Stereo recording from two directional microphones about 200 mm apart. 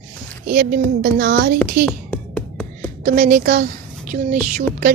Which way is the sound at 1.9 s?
Centre (ahead or behind).